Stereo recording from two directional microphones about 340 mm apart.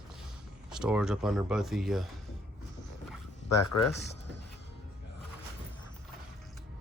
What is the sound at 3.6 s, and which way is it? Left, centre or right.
Speech, left.